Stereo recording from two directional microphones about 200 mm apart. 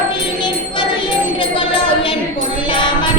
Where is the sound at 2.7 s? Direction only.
25° left (ahead or behind).